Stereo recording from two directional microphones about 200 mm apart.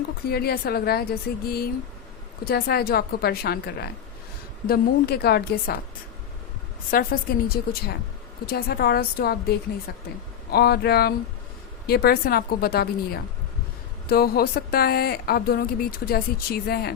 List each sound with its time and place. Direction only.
0.3 s speech: 50° left (ahead or behind)
6.9 s speech: 45° left (ahead or behind)